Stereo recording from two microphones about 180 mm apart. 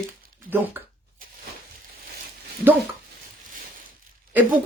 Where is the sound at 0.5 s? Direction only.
10° right (ahead or behind).